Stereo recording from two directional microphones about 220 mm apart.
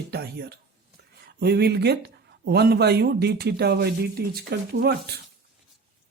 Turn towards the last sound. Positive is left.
turn(degrees=-45)  # may be behind; listen again after turning